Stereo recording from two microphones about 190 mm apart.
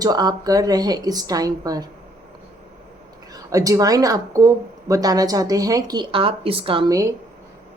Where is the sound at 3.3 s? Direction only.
20° right (ahead or behind).